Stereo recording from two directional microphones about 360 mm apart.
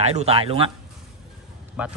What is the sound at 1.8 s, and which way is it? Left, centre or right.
Speech, centre.